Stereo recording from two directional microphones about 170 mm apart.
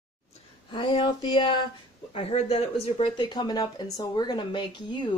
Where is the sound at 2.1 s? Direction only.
35° left (ahead or behind).